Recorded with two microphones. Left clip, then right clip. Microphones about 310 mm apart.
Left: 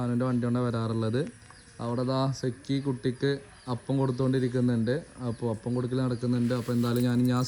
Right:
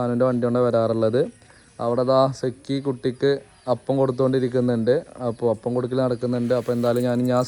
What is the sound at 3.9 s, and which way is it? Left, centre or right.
Speech, right.